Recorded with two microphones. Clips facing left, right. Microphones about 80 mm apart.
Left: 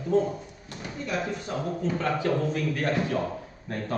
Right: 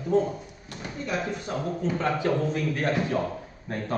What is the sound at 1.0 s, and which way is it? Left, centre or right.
Speech, right.